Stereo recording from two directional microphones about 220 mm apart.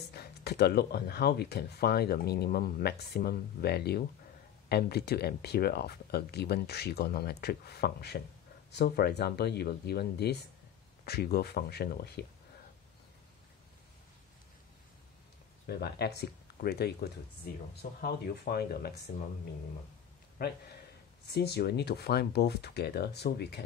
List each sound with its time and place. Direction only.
0.1 s speech: 45° left (ahead or behind)
15.6 s speech: 45° left (ahead or behind)
20.4 s speech: 45° left (ahead or behind)